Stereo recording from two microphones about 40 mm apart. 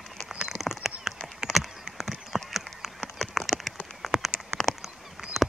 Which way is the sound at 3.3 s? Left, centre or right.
Centre.